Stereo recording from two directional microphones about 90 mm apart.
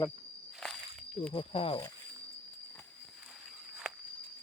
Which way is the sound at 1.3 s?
80° left.